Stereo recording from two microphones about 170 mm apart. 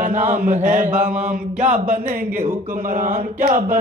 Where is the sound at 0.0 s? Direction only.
50° right (ahead or behind).